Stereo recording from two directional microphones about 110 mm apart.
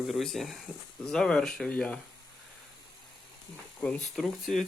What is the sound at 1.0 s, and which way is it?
Speech, 5° left (ahead or behind).